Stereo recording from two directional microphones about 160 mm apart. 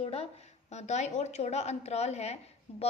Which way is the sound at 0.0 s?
40° left (ahead or behind).